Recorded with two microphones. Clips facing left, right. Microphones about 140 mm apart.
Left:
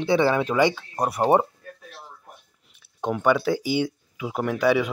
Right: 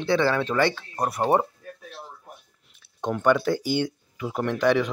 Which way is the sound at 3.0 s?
5° left (ahead or behind).